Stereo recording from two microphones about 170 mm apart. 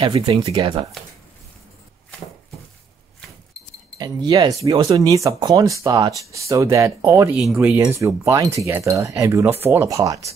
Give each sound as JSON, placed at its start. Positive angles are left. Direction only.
{"t": 0.0, "sound": "speech", "side_deg": -30}
{"t": 4.0, "sound": "speech", "side_deg": -25}